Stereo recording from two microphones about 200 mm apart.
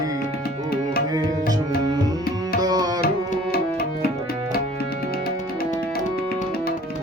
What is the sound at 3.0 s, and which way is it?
Tabla, 50° left (ahead or behind).